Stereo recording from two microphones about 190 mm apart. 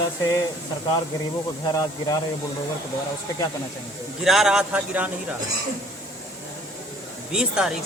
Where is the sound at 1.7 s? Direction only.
20° left (ahead or behind).